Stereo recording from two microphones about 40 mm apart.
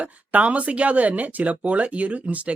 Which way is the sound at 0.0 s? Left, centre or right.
Right.